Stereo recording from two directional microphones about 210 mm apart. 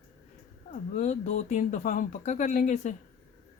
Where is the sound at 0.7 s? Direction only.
35° left (ahead or behind).